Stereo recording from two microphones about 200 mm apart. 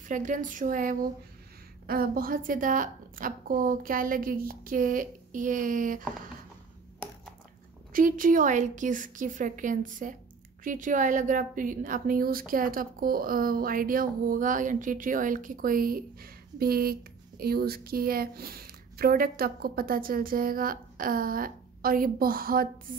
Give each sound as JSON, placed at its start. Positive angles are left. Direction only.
{"t": 0.1, "sound": "a woman's voice", "side_deg": -40}
{"t": 7.9, "sound": "a woman's voice", "side_deg": -40}